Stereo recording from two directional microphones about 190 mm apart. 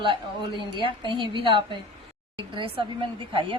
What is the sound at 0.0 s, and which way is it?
A woman's voice, 25° right (ahead or behind).